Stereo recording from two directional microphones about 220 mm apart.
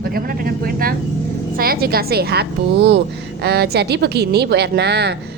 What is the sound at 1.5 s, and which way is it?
A woman's voice, 40° right (ahead or behind).